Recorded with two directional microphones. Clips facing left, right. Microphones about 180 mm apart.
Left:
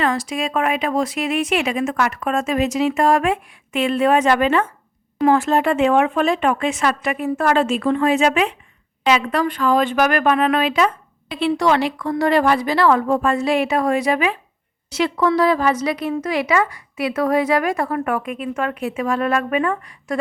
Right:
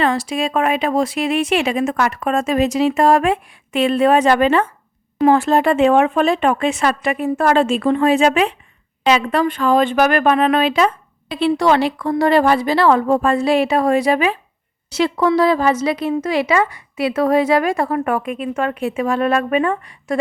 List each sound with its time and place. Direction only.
0.0 s a woman's voice: 30° right (ahead or behind)